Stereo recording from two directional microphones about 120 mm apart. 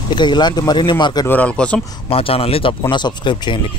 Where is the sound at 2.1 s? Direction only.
55° left (ahead or behind).